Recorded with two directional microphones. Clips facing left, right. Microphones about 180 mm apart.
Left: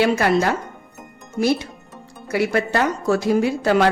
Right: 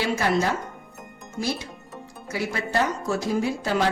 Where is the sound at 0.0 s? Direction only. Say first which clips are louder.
Left 6 dB; 65° left (ahead or behind).